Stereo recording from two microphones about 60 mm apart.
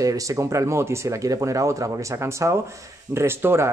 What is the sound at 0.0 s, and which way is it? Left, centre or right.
Speech, right.